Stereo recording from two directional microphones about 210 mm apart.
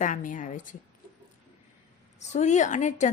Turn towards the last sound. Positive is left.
turn(degrees=35)  # may be behind; listen again after turning